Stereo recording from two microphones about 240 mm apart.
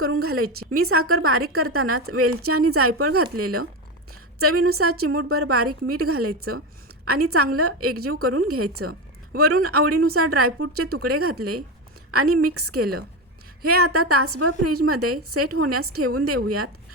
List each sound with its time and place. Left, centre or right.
0.0 s a woman's voice: right